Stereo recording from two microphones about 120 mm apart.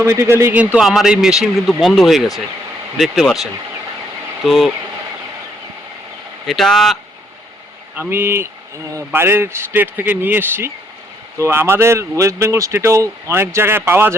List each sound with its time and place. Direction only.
0.0 s speech: 20° right (ahead or behind)
0.6 s speech: 10° right (ahead or behind)
6.5 s speech: 5° left (ahead or behind)
7.9 s speech: 20° right (ahead or behind)